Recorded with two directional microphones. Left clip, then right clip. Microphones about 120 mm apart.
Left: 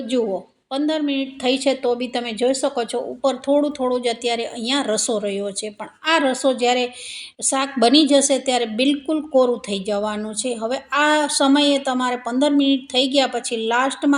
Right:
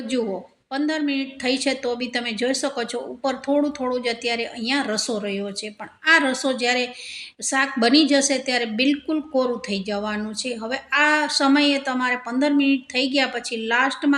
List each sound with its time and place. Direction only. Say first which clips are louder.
0.7 s a woman's voice: left 2 dB; 25° left (ahead or behind)